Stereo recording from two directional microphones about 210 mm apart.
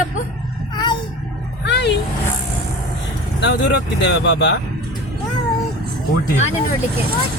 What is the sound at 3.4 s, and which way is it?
Speech, 60° left (ahead or behind).